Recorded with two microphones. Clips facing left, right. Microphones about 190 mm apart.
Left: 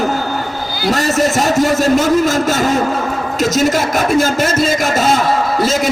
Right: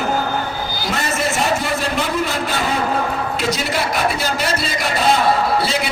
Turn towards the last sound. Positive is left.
turn(degrees=45)  # may be behind; listen again after turning